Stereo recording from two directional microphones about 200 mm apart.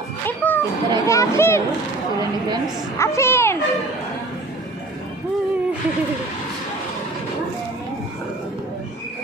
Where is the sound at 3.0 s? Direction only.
15° left (ahead or behind).